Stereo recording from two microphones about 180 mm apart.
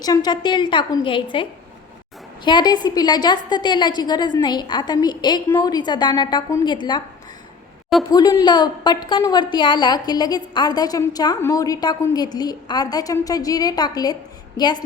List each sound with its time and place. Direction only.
0.0 s a woman's voice: 20° left (ahead or behind)
8.1 s a woman's voice: 20° left (ahead or behind)